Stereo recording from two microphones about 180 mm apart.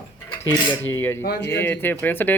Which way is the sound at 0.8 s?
10° left (ahead or behind).